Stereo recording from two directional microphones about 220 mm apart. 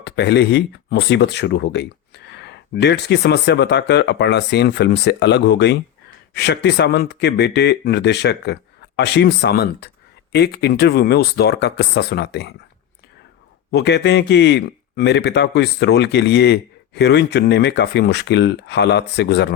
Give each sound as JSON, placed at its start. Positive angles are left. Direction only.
{"t": 0.0, "sound": "speech", "side_deg": 50}
{"t": 13.7, "sound": "speech", "side_deg": 50}